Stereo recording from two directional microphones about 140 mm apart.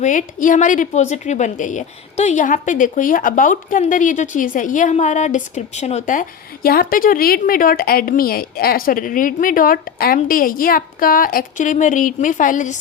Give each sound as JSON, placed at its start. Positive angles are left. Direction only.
{"t": 0.0, "sound": "a woman's voice", "side_deg": 65}